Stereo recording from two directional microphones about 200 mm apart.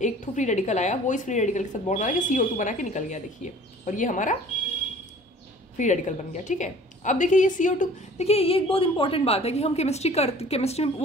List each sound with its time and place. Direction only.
0.0 s a woman's voice: 35° left (ahead or behind)
5.8 s a woman's voice: 35° left (ahead or behind)